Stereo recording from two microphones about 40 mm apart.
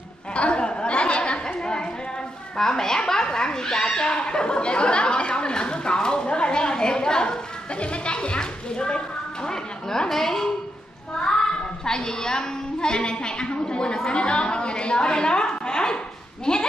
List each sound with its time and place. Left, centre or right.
0.3 s chatter: left
2.5 s a sound: centre
11.8 s a woman's voice: centre
16.5 s sheep: centre